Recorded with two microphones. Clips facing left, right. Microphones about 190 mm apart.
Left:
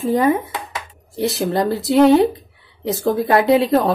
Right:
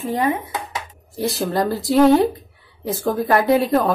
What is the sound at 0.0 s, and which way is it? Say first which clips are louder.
Speech: left 5 dB; 40° left (ahead or behind).